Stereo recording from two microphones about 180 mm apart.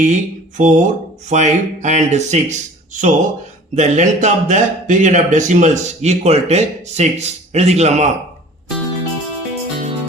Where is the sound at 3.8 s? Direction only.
40° right (ahead or behind).